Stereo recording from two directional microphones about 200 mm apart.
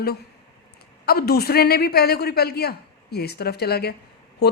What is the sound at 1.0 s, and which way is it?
Speech, 50° left (ahead or behind).